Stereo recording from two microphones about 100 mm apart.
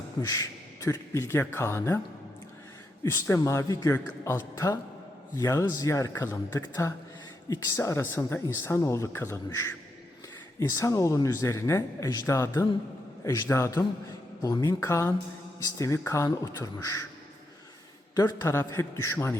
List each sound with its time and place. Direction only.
0.2 s a sound: 30° left (ahead or behind)
0.9 s speech: 25° left (ahead or behind)
3.0 s speech: 30° left (ahead or behind)
18.1 s a man's voice: 40° left (ahead or behind)
18.7 s speech: 30° left (ahead or behind)